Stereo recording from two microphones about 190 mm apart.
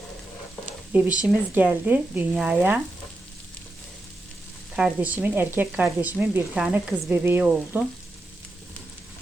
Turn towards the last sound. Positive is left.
turn(degrees=-10)  # may be behind; listen again after turning